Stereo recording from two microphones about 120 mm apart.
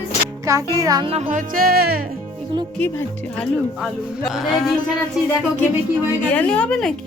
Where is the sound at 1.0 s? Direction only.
50° right (ahead or behind).